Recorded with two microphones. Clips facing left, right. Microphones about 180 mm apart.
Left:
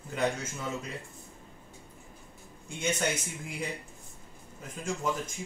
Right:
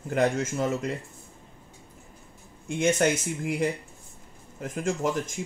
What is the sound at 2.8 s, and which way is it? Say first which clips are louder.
Speech: right 8 dB; 85° right.